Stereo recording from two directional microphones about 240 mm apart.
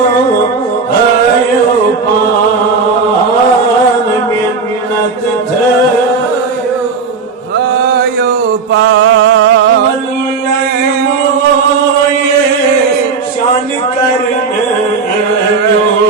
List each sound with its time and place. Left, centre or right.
7.9 s chant: right